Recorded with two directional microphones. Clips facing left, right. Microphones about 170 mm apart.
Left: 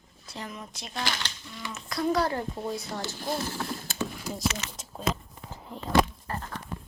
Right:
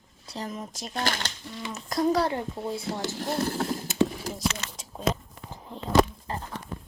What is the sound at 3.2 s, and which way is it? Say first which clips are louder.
Speech: right 4 dB; 65° right (ahead or behind).